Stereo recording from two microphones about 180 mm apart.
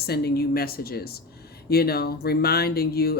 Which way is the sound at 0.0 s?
60° left (ahead or behind).